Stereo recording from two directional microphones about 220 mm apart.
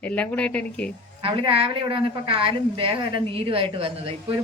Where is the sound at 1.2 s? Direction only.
25° right (ahead or behind).